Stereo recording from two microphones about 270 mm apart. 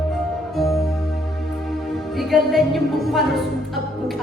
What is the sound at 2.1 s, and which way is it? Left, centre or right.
Music, centre.